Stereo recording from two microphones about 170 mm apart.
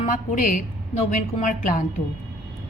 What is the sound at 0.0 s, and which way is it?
A woman's voice, 45° left (ahead or behind).